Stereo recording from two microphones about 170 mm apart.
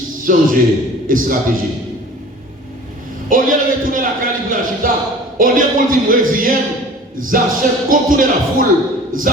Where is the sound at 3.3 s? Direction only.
55° right (ahead or behind).